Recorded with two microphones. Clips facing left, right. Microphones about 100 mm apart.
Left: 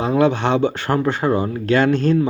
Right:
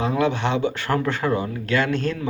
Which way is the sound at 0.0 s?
35° left (ahead or behind).